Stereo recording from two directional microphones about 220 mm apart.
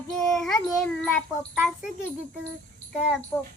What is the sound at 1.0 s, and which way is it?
Speech, 5° left (ahead or behind).